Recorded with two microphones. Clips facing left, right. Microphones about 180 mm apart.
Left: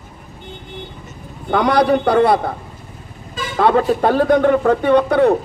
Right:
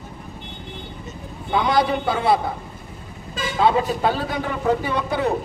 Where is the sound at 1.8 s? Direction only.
65° left (ahead or behind).